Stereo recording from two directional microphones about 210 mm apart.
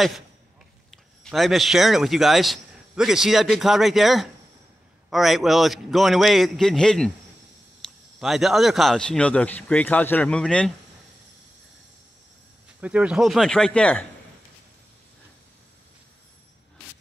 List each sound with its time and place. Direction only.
1.2 s a man's voice: centre (ahead or behind)
7.8 s a sound: 5° left (ahead or behind)
8.2 s a man's voice: centre (ahead or behind)
12.8 s a man's voice: 5° right (ahead or behind)